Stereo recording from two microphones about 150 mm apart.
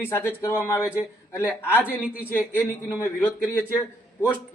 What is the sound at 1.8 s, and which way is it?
Speech, 10° right (ahead or behind).